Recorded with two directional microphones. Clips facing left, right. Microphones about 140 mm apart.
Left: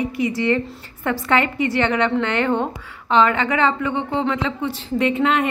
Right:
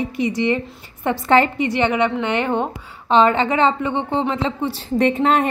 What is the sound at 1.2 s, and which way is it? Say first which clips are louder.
Speech: right 5 dB; 35° right (ahead or behind).